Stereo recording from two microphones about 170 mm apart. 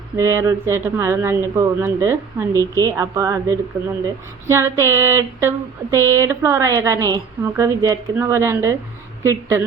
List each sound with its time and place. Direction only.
0.2 s speech: 15° right (ahead or behind)
2.5 s speech: 15° left (ahead or behind)
2.8 s speech: 20° right (ahead or behind)